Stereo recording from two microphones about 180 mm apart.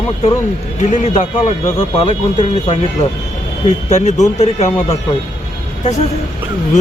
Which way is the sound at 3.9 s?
40° left (ahead or behind).